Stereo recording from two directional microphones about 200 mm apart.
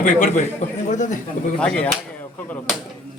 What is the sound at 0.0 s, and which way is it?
A man's voice, 40° left (ahead or behind).